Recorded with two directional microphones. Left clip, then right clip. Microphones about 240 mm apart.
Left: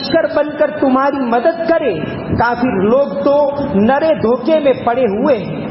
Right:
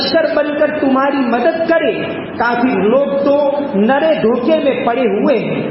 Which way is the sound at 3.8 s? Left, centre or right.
Left.